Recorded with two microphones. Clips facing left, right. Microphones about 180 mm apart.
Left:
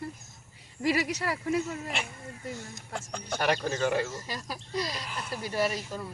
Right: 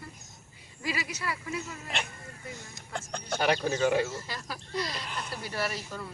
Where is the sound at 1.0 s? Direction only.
75° left (ahead or behind).